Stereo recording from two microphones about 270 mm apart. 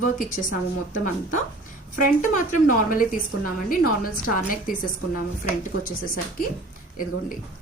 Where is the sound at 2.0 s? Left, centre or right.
Left.